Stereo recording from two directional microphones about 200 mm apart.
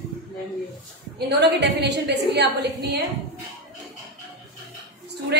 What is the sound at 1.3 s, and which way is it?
A woman's voice, 55° right (ahead or behind).